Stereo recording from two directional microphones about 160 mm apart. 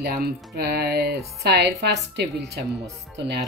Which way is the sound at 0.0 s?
80° right.